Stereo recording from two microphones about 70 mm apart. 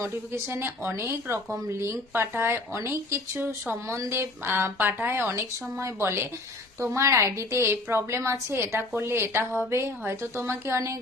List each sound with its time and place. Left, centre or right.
0.0 s speech: right
4.4 s speech: right